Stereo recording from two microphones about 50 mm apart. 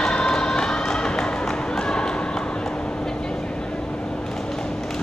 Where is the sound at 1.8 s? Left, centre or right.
Centre.